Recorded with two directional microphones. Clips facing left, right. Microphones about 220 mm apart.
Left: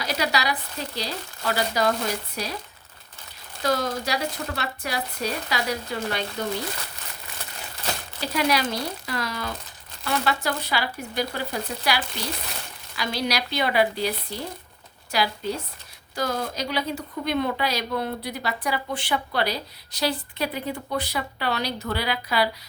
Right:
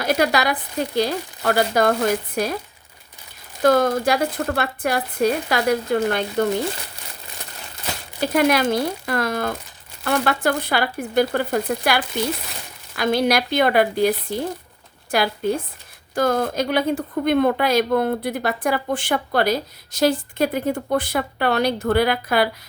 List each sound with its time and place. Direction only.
0.0 s a woman's voice: 55° right (ahead or behind)
3.6 s a woman's voice: 55° right (ahead or behind)
8.2 s a woman's voice: 50° right (ahead or behind)